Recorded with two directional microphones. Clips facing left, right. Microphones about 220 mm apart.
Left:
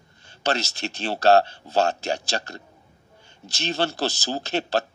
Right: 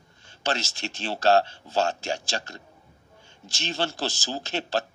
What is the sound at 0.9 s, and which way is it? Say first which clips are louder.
A man's voice: left 3 dB; 65° left (ahead or behind).